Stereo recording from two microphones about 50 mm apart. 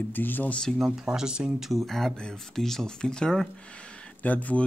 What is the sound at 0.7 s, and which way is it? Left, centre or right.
Speech, centre.